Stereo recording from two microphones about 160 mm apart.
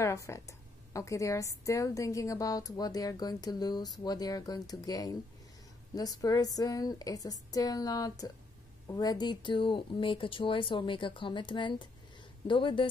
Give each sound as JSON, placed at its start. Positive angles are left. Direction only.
{"t": 0.0, "sound": "a woman's voice", "side_deg": 20}